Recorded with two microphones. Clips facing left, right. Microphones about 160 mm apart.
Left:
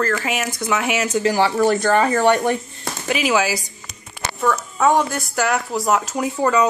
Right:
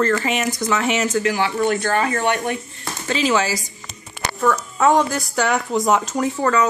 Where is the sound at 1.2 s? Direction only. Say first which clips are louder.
Left 3 dB; 35° left (ahead or behind).